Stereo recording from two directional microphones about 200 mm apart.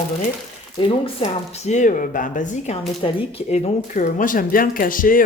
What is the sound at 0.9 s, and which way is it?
Speech, 30° left (ahead or behind).